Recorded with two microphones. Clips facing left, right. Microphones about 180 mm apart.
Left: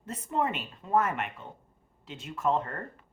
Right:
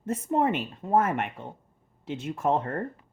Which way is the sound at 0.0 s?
50° right (ahead or behind).